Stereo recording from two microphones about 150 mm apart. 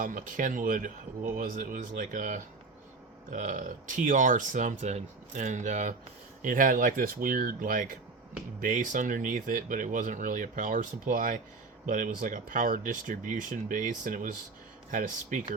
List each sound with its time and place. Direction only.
0.0 s speech: 65° right (ahead or behind)